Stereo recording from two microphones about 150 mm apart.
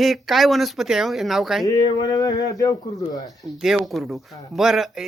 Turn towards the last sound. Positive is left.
turn(degrees=0)  # may be behind; listen again after turning